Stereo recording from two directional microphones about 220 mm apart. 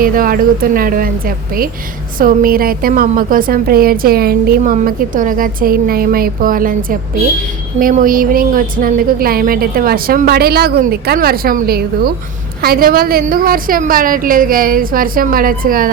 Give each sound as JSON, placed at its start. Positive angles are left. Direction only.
{"t": 0.0, "sound": "a woman's voice", "side_deg": -40}
{"t": 2.1, "sound": "a woman's voice", "side_deg": -40}
{"t": 7.8, "sound": "a woman's voice", "side_deg": -40}